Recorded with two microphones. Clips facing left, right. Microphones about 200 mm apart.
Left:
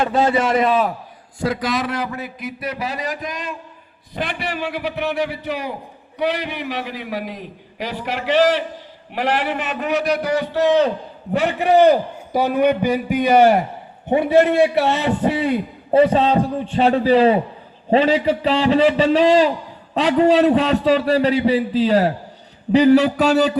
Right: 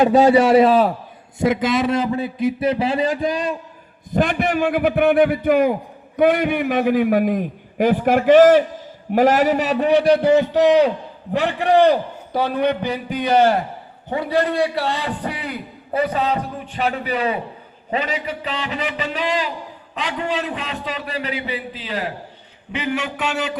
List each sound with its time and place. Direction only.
0.0 s a man's voice: 15° right (ahead or behind)
0.5 s a man's voice: 30° right (ahead or behind)
4.1 s a man's voice: 45° right (ahead or behind); by 10.9 s 15° right (ahead or behind)
11.3 s a man's voice: 5° left (ahead or behind)
14.1 s a man's voice: 25° left (ahead or behind)